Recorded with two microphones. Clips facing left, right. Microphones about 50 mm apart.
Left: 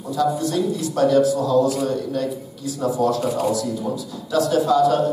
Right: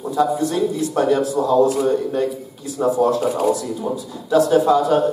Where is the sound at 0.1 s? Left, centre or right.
Right.